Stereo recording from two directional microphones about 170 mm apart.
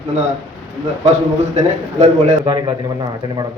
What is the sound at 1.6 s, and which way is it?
Speech, 40° right (ahead or behind).